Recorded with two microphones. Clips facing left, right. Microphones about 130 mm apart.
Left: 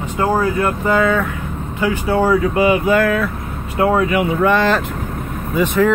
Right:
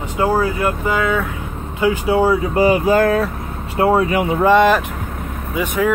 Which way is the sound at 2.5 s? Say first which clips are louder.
Even; 35° right (ahead or behind).